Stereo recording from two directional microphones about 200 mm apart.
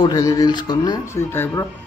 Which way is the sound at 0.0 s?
15° left (ahead or behind).